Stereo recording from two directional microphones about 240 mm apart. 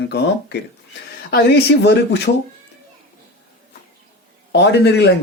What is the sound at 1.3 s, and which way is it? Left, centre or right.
Speech, left.